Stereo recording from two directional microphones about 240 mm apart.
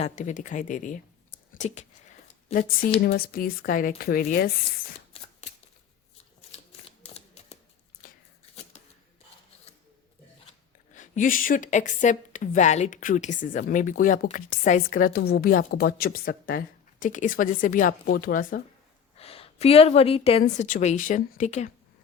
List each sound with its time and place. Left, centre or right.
0.0 s speech: left
5.1 s a sound: left
7.0 s typewriter: left
8.0 s a sound: left
10.9 s speech: left
19.1 s a woman's voice: left